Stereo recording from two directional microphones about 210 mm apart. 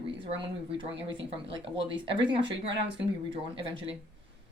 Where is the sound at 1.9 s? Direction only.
25° right (ahead or behind).